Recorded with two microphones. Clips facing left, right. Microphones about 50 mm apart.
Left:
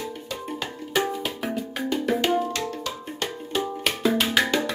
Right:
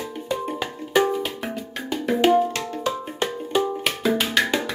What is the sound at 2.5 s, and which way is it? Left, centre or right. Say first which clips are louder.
Music: right 4 dB; right.